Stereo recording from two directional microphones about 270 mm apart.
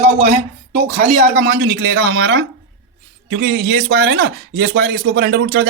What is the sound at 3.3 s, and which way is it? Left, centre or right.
Speech, right.